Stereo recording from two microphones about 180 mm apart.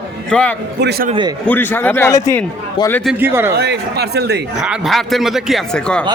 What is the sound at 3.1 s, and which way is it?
Speech, 10° right (ahead or behind).